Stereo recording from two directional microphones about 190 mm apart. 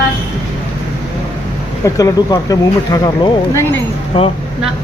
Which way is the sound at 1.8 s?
20° left (ahead or behind).